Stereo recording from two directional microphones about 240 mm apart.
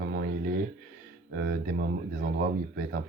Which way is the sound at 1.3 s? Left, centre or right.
Right.